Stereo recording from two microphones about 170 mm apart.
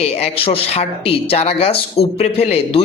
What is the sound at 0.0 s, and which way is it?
Speech, 35° left (ahead or behind).